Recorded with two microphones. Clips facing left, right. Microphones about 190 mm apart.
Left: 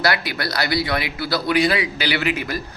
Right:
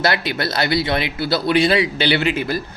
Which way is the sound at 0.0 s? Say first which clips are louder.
Right 2 dB; 25° right (ahead or behind).